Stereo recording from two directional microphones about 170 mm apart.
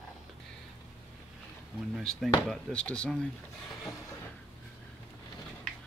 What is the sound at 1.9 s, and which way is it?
Speech, centre (ahead or behind).